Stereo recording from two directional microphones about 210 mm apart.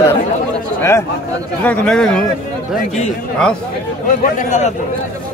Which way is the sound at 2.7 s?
30° left (ahead or behind).